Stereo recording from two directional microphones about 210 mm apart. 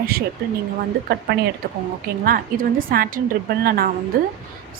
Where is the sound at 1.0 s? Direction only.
50° right (ahead or behind).